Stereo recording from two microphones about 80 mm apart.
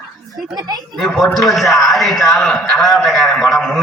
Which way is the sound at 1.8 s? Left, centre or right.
Centre.